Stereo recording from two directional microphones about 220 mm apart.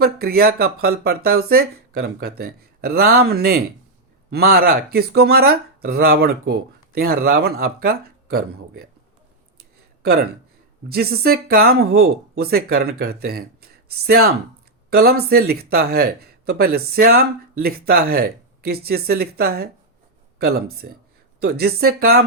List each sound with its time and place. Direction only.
0.0 s speech: 45° right (ahead or behind)
10.0 s speech: 45° right (ahead or behind)
20.7 s speech: 45° right (ahead or behind)